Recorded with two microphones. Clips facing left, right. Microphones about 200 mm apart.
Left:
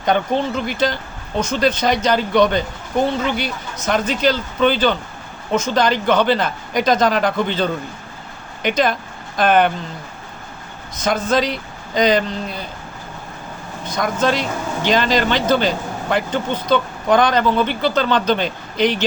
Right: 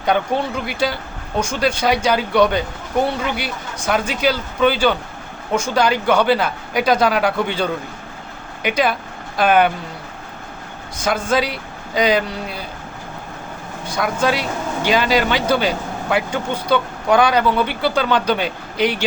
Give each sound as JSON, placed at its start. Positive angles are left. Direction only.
{"t": 0.0, "sound": "speech", "side_deg": -5}
{"t": 11.0, "sound": "speech", "side_deg": -10}
{"t": 13.8, "sound": "speech", "side_deg": -10}